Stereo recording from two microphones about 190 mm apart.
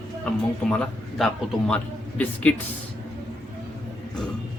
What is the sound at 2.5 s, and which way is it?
Speech, 10° left (ahead or behind).